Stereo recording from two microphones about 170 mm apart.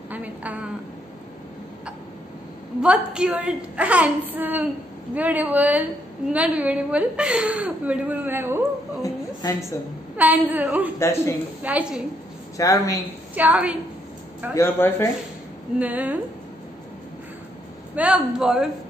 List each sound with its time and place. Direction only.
0.1 s a sound: 10° right (ahead or behind)
2.8 s a woman's voice: 5° right (ahead or behind)
9.0 s a sound: 20° left (ahead or behind)
10.1 s a woman's voice: 10° right (ahead or behind)
11.0 s speech: 15° left (ahead or behind)
11.6 s a woman's voice: 10° right (ahead or behind)
12.5 s speech: 20° left (ahead or behind)
13.3 s a woman's voice: 10° right (ahead or behind)
14.5 s speech: 15° left (ahead or behind)
15.8 s a woman's voice: 10° right (ahead or behind)
17.9 s a man's voice: 5° right (ahead or behind)